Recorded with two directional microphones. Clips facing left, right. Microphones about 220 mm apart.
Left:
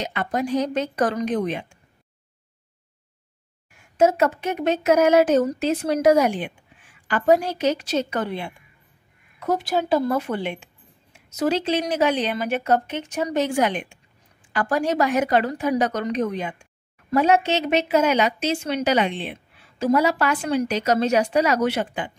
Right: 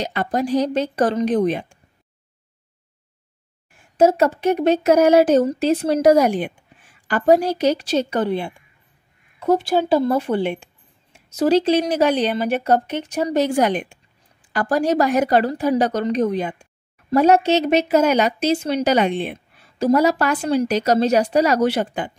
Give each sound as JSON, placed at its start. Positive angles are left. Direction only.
{"t": 0.0, "sound": "speech", "side_deg": -35}
{"t": 3.7, "sound": "speech", "side_deg": -35}